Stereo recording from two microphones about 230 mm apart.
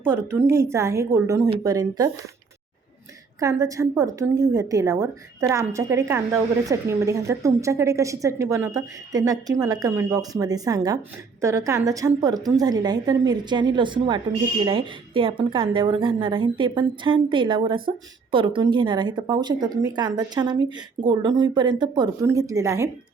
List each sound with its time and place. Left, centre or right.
0.1 s a woman's voice: centre
3.4 s a woman's voice: centre